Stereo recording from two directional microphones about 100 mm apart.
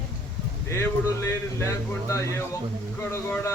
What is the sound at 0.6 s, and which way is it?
A man's voice, 25° left (ahead or behind).